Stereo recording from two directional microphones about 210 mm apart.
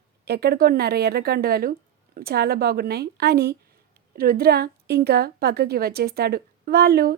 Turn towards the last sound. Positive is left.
turn(degrees=-50)  # may be behind; listen again after turning